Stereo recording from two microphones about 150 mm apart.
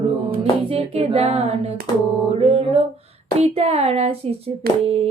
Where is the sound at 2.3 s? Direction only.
40° right (ahead or behind).